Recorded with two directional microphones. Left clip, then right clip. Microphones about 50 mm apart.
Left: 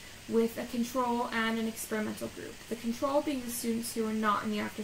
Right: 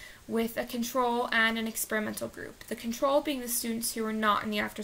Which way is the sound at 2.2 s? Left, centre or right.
Right.